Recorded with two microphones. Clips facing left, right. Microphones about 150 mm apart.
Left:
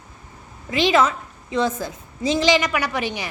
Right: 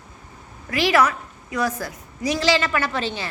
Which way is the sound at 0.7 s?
20° left (ahead or behind).